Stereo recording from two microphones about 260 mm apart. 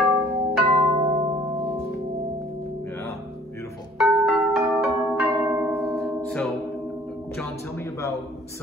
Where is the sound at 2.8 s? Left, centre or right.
Centre.